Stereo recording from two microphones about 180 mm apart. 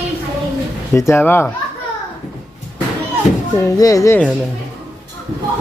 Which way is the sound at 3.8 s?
20° left (ahead or behind).